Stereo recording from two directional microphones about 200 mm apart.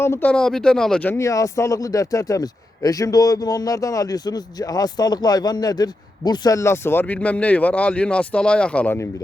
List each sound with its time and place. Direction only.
0.0 s speech: 10° left (ahead or behind)